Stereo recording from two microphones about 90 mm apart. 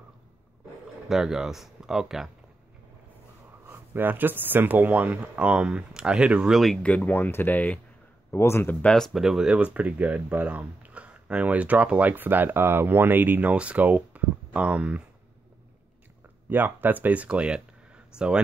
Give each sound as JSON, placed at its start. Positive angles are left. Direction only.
{"t": 1.0, "sound": "speech", "side_deg": -5}
{"t": 3.6, "sound": "speech", "side_deg": -25}
{"t": 6.8, "sound": "speech", "side_deg": 20}
{"t": 8.3, "sound": "speech", "side_deg": 30}
{"t": 8.8, "sound": "speech", "side_deg": 5}
{"t": 9.1, "sound": "speech", "side_deg": -5}
{"t": 16.4, "sound": "speech", "side_deg": -20}